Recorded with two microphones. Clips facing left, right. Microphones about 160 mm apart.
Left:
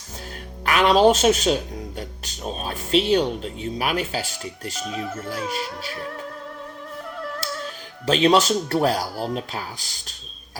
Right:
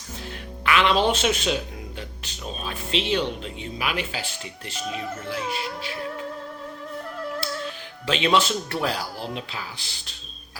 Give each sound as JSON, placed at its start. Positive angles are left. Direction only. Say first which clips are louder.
{"t": 0.6, "sound": "speech", "louder": "left 5 dB", "side_deg": 40}
{"t": 7.4, "sound": "music", "louder": "even", "side_deg": 40}
{"t": 8.0, "sound": "speech", "louder": "left 4 dB", "side_deg": 40}